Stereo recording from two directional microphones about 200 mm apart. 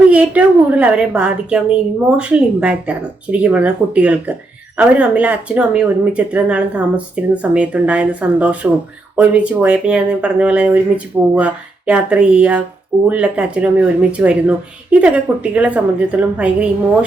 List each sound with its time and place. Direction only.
0.1 s speech: 5° right (ahead or behind)